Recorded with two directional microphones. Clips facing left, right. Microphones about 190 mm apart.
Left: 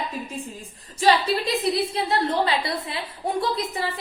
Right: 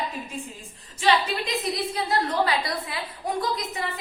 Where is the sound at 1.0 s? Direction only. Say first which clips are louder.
Left 3 dB; 40° left (ahead or behind).